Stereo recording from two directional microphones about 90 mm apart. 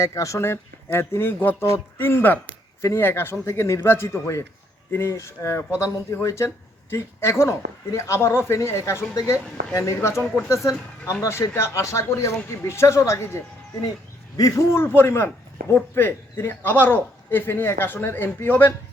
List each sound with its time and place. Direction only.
0.0 s a man's voice: 35° left (ahead or behind)